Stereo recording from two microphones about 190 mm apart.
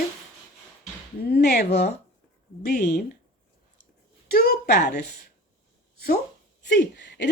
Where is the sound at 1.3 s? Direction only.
50° left (ahead or behind).